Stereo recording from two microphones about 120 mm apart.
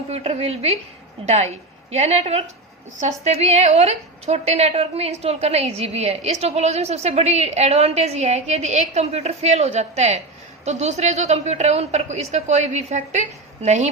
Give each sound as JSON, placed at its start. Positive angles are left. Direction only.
{"t": 0.1, "sound": "a woman's voice", "side_deg": -60}